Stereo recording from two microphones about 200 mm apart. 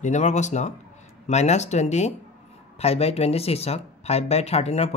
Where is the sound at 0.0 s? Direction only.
35° left (ahead or behind).